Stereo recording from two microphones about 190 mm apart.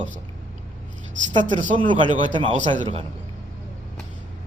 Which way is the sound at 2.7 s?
30° right (ahead or behind).